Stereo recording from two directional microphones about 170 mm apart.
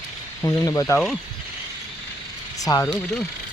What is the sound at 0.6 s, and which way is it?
Speech, 20° left (ahead or behind).